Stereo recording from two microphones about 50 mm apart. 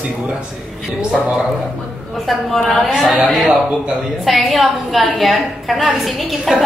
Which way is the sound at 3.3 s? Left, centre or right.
Centre.